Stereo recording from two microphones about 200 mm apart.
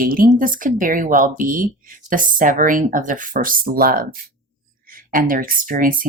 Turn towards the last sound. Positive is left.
turn(degrees=-45)  # may be behind; listen again after turning